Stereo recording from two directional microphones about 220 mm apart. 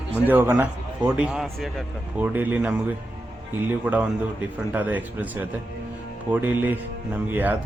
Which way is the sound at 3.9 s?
5° right (ahead or behind).